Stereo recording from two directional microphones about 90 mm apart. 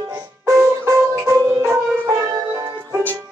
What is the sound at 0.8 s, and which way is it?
Music, 30° right (ahead or behind).